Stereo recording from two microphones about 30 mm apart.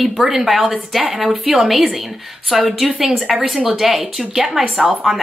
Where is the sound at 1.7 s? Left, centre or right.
Centre.